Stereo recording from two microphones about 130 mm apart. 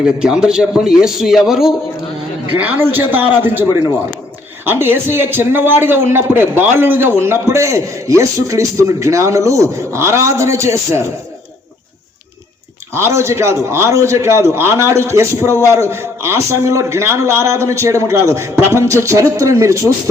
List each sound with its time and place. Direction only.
0.0 s a man's voice: 5° right (ahead or behind)
2.6 s a man's voice: 15° right (ahead or behind)
12.9 s a man's voice: 20° right (ahead or behind)